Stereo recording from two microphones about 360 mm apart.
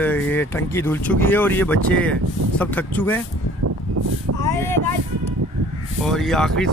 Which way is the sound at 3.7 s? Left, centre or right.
Right.